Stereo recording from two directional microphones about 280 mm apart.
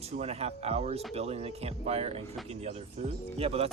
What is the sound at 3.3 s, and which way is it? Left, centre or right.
Speech, right.